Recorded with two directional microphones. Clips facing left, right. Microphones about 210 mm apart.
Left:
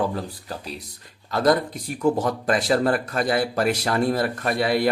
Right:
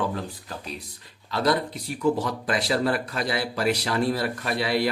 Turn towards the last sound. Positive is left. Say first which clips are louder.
# left 3 dB
turn(degrees=50)  # may be behind; listen again after turning